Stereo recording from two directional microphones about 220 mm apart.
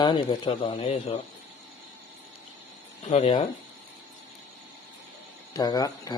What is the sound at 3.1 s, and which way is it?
Speech, 30° left (ahead or behind).